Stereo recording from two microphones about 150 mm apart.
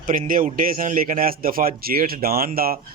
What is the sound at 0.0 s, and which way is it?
Speech, 70° right (ahead or behind).